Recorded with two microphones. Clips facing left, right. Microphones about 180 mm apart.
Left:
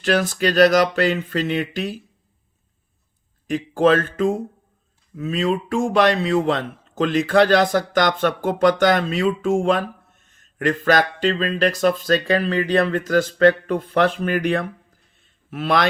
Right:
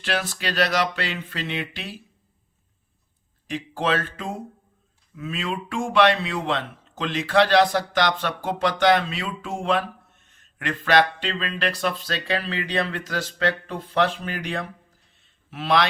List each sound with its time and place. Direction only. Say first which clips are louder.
0.0 s a man's voice: left 8 dB; 45° left (ahead or behind)
3.4 s a man's voice: left 9 dB; 45° left (ahead or behind)